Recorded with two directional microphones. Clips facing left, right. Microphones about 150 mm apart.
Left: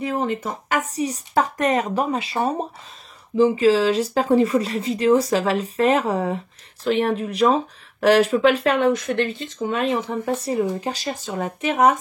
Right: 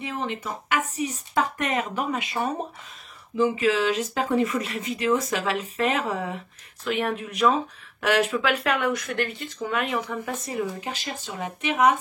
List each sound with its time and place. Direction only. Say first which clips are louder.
0.0 s speech: left 7 dB; 40° left (ahead or behind)